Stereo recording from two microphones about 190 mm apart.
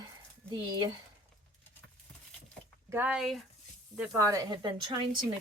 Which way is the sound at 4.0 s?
15° right (ahead or behind).